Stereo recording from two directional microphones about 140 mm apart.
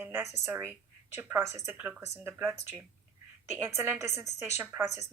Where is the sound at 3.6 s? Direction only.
15° right (ahead or behind).